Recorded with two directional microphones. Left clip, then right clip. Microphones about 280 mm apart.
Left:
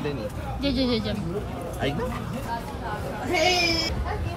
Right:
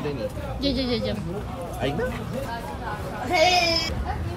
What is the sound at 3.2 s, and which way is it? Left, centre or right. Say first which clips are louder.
Speech: right 3 dB; centre.